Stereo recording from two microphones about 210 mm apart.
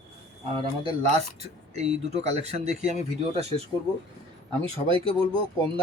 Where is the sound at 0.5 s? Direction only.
25° right (ahead or behind).